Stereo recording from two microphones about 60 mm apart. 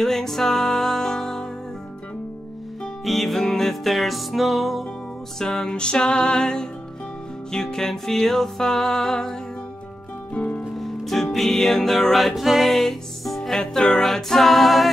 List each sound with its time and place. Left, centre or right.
0.0 s music: centre
3.1 s music: centre
5.4 s music: centre
10.3 s music: left
10.8 s music: centre